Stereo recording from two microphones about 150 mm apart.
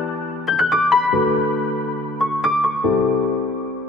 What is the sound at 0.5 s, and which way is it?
Music, centre (ahead or behind).